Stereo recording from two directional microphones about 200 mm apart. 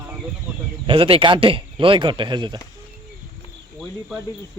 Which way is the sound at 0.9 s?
25° right (ahead or behind).